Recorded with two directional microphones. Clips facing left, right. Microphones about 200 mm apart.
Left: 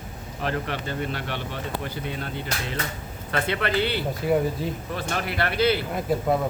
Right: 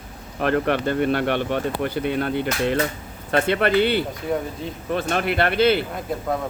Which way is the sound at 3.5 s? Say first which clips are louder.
Right 6 dB; 50° right (ahead or behind).